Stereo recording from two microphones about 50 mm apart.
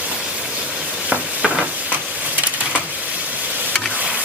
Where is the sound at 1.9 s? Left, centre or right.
Right.